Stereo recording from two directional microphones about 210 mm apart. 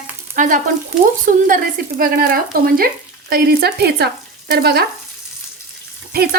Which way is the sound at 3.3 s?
50° right (ahead or behind).